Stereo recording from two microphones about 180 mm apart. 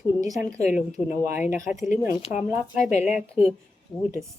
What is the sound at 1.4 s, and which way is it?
Speech, 45° left (ahead or behind).